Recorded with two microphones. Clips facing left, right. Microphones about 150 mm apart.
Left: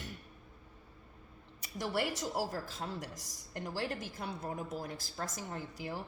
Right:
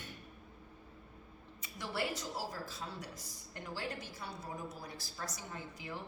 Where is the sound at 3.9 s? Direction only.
50° left (ahead or behind).